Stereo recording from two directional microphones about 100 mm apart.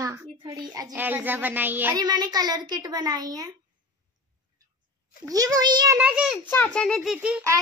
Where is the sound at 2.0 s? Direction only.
40° right (ahead or behind).